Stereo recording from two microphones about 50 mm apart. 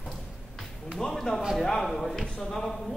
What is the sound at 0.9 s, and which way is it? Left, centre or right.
A man's voice, centre.